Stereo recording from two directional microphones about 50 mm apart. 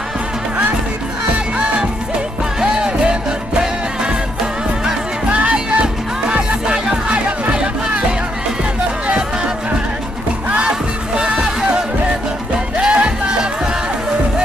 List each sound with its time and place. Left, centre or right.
2.6 s music: centre
5.3 s music: right
7.1 s music: right
11.1 s music: centre